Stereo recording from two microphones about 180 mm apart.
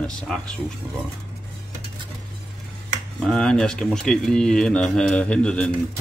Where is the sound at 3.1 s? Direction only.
5° left (ahead or behind).